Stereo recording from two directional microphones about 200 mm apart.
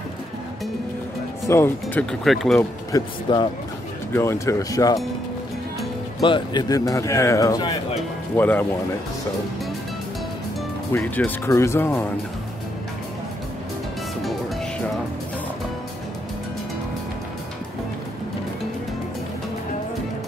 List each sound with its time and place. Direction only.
1.5 s speech: 10° left (ahead or behind)
2.9 s speech: 20° left (ahead or behind)
6.2 s speech: 25° left (ahead or behind)
10.9 s speech: 10° left (ahead or behind)